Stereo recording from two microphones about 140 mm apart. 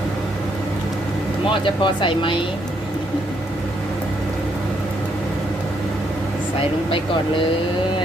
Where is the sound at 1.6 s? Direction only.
35° left (ahead or behind).